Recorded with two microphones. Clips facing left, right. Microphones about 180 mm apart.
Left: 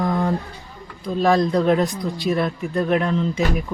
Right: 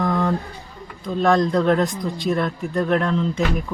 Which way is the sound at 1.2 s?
5° left (ahead or behind).